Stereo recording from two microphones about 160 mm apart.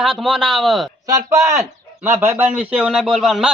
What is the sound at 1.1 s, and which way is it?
A man's voice, 20° right (ahead or behind).